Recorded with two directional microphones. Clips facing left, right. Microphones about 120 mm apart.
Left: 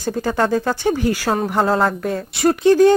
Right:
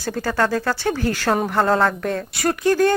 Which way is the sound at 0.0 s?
20° left (ahead or behind).